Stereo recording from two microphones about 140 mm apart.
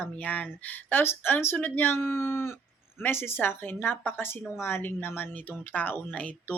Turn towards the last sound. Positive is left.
turn(degrees=10)  # may be behind; listen again after turning